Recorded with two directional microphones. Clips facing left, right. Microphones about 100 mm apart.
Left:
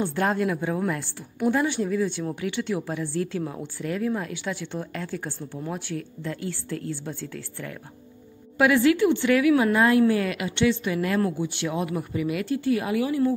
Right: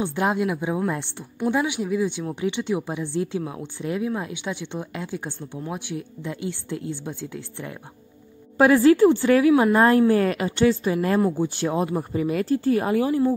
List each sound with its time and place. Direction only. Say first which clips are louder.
0.0 s speech: right 1 dB; 15° right (ahead or behind)
8.5 s speech: right 4 dB; 35° right (ahead or behind)